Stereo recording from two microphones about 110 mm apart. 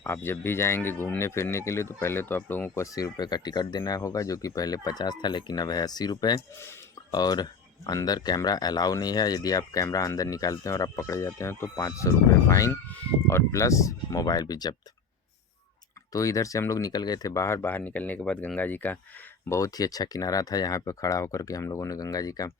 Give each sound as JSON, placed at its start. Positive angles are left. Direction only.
{"t": 0.0, "sound": "speech", "side_deg": 20}
{"t": 16.1, "sound": "speech", "side_deg": 30}
{"t": 19.5, "sound": "speech", "side_deg": 30}